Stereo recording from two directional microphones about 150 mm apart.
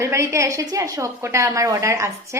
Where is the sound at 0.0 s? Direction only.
20° right (ahead or behind).